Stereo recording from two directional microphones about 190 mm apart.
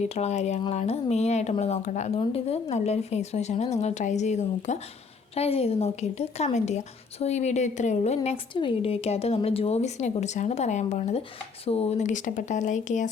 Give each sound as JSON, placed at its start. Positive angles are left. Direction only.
{"t": 0.0, "sound": "speech", "side_deg": 35}